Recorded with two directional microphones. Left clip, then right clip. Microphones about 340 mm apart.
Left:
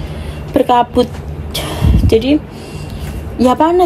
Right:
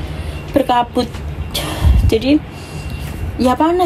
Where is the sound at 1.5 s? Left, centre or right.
Centre.